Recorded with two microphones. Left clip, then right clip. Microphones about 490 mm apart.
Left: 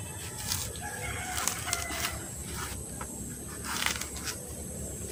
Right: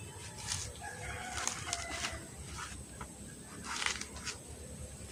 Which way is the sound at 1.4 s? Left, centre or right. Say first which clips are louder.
Left 5 dB; right.